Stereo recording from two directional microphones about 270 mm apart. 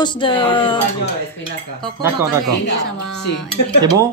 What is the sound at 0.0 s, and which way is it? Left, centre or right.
Music, centre.